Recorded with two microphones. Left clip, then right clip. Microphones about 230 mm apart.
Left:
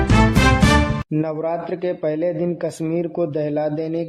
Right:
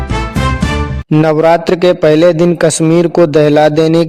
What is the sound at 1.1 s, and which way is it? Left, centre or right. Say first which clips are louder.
A man's voice: right 16 dB; right.